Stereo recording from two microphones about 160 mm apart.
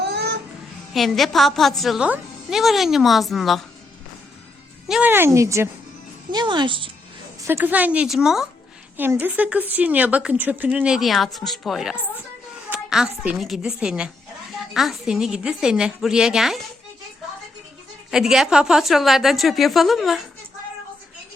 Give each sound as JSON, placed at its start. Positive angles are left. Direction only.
{"t": 0.0, "sound": "music", "side_deg": -90}
{"t": 0.9, "sound": "a woman's voice", "side_deg": 0}
{"t": 4.9, "sound": "speech", "side_deg": -10}
{"t": 7.4, "sound": "a woman's voice", "side_deg": -15}
{"t": 18.1, "sound": "a woman's voice", "side_deg": -5}